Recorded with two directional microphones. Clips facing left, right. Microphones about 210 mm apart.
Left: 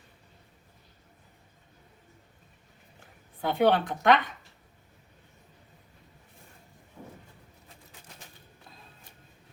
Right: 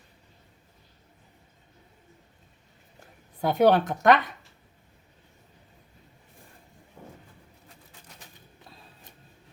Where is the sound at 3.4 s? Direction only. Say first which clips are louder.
Right 3 dB; 45° right (ahead or behind).